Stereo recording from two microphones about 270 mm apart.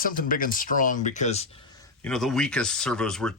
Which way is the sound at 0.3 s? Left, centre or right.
Left.